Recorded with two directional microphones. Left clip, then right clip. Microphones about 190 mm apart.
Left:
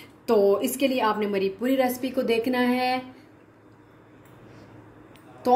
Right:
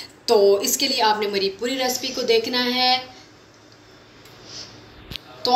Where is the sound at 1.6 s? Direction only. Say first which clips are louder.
Right 1 dB; 50° left (ahead or behind).